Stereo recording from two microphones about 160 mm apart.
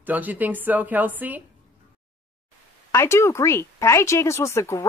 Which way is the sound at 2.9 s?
15° left (ahead or behind).